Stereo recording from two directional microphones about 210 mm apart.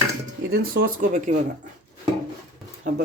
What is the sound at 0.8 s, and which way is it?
Speech, 35° right (ahead or behind).